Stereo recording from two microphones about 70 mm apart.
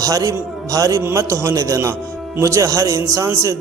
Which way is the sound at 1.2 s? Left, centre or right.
Right.